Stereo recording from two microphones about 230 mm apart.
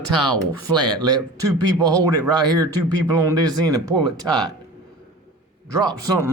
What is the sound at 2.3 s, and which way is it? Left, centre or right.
Speech, centre.